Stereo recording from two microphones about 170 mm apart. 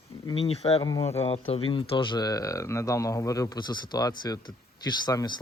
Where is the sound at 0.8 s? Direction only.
20° left (ahead or behind).